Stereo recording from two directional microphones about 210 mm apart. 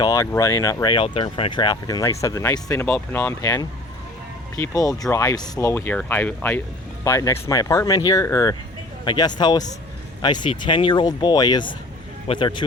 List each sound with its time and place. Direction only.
0.0 s speech: 15° left (ahead or behind)